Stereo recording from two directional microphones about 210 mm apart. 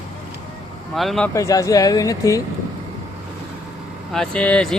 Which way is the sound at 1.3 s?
15° left (ahead or behind).